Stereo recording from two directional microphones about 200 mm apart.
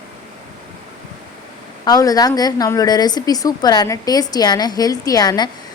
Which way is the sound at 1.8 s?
20° left (ahead or behind).